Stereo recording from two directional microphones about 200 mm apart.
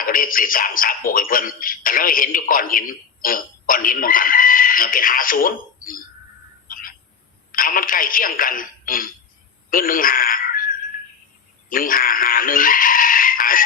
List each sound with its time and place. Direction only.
0.0 s speech: 45° left (ahead or behind)
6.7 s bird: 45° left (ahead or behind)
7.5 s speech: 45° left (ahead or behind)
9.6 s a sound: 45° left (ahead or behind)
11.7 s speech: 45° left (ahead or behind)